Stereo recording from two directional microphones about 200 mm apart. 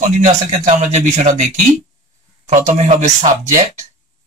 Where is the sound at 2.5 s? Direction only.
35° right (ahead or behind).